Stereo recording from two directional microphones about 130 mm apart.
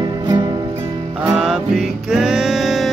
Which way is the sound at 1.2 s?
5° right (ahead or behind).